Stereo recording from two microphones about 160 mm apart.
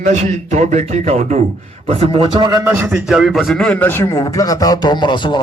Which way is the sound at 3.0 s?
5° right (ahead or behind).